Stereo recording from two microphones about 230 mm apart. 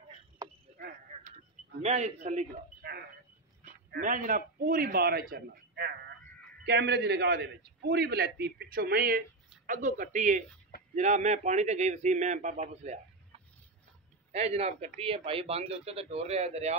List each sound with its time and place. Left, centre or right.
0.4 s a sound: centre
1.8 s speech: right
3.9 s a man's voice: right
14.3 s speech: right